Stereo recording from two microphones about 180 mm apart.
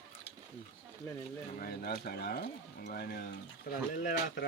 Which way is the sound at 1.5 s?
55° left (ahead or behind).